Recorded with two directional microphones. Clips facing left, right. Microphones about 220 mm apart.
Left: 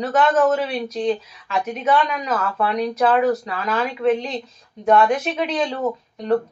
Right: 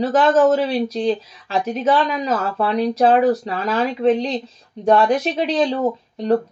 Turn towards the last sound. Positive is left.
turn(degrees=-30)  # may be behind; listen again after turning